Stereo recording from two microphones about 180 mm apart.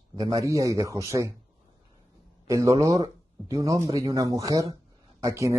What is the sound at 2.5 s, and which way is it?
Speech, 15° right (ahead or behind).